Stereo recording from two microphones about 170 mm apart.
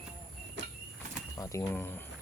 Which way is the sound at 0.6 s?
90° right.